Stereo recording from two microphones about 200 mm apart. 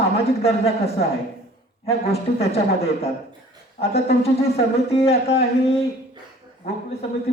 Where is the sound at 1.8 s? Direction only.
30° left (ahead or behind).